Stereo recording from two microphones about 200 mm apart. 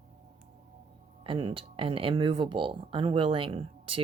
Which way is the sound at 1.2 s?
25° right (ahead or behind).